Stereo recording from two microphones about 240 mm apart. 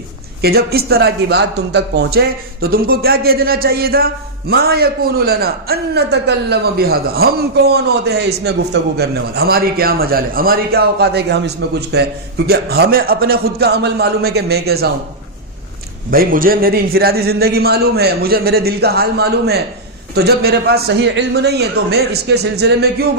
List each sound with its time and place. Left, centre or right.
0.4 s a man's voice: right
16.1 s a man's voice: right